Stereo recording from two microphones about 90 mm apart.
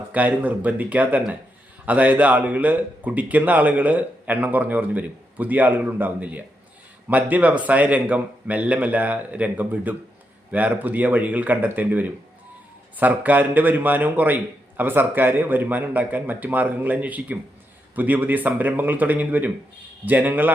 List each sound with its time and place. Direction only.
0.1 s a man's voice: 20° right (ahead or behind)